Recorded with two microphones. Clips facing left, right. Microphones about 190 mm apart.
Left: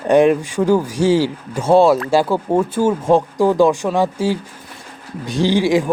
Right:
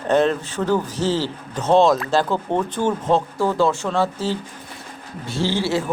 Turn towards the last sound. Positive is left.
turn(degrees=15)  # may be behind; listen again after turning